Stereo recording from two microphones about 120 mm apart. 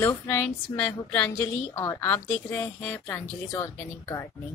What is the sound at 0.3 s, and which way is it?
A woman's voice, 15° left (ahead or behind).